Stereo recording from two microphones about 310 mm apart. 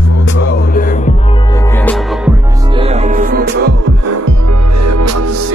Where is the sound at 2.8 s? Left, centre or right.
Centre.